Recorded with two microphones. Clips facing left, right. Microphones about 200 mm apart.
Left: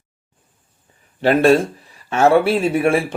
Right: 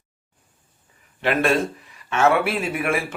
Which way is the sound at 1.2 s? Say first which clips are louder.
Left 7 dB; 35° left (ahead or behind).